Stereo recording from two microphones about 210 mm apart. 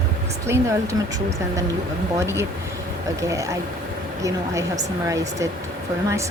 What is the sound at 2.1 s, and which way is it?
Speech, 10° right (ahead or behind).